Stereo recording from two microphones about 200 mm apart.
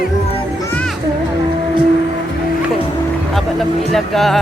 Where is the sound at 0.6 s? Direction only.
5° left (ahead or behind).